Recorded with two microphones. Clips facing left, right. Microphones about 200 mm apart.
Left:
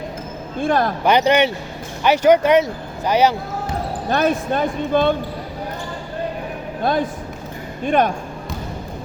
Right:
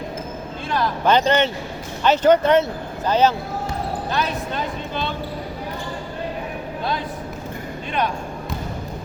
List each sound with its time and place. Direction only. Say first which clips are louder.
0.6 s speech: left 6 dB; 50° left (ahead or behind)
1.0 s speech: left 1 dB; 15° left (ahead or behind)
4.1 s speech: left 9 dB; 50° left (ahead or behind)
6.8 s speech: left 8 dB; 50° left (ahead or behind)